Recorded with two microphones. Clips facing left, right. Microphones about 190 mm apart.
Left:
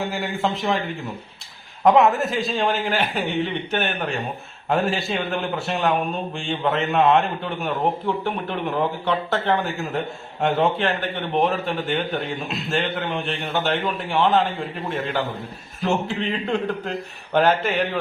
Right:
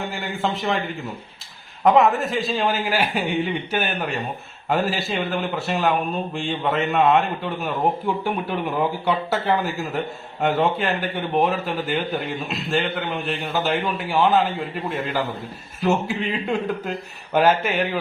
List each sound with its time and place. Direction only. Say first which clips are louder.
0.1 s a man's voice: left 1 dB; centre (ahead or behind)
1.8 s a man's voice: even; centre (ahead or behind)
15.8 s a man's voice: right 2 dB; 5° right (ahead or behind)